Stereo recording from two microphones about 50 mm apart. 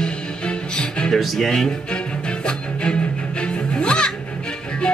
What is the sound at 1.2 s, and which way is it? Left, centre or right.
Music, centre.